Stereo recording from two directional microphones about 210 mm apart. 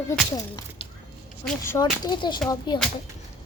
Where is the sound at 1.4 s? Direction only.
10° left (ahead or behind).